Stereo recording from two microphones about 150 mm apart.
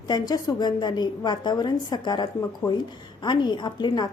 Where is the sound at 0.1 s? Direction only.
25° left (ahead or behind).